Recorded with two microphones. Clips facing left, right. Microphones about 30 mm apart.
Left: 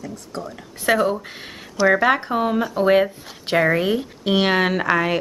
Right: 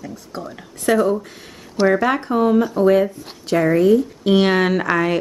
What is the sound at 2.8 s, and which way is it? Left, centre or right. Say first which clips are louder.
Speech: right 2 dB; left.